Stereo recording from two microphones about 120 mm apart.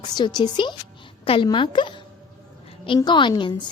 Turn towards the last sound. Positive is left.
turn(degrees=40)  # may be behind; listen again after turning